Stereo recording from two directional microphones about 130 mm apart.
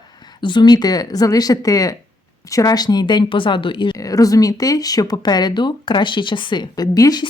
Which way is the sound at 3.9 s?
25° left (ahead or behind).